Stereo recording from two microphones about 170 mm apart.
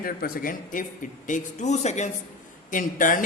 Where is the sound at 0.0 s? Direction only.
60° left (ahead or behind).